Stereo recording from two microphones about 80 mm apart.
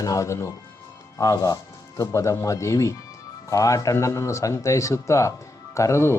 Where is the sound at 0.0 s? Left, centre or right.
Left.